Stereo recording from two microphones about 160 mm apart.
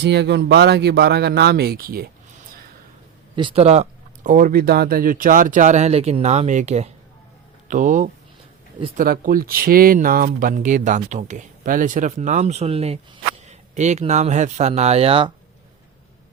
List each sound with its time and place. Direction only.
0.0 s a man's voice: 90° right; by 2.0 s 75° right (ahead or behind)
3.3 s speech: 35° right (ahead or behind)